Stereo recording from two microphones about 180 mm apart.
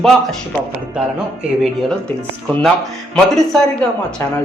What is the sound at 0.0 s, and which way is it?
Speech, centre (ahead or behind).